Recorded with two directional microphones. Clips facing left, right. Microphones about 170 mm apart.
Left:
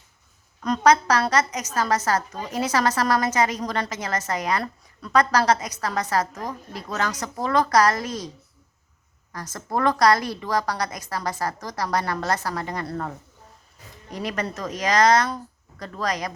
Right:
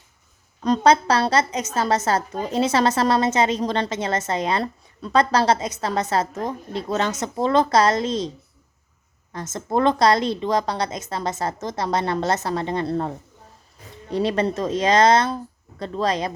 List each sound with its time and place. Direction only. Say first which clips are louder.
0.6 s a woman's voice: right 2 dB; 30° right (ahead or behind)
9.3 s a woman's voice: right 5 dB; 25° right (ahead or behind)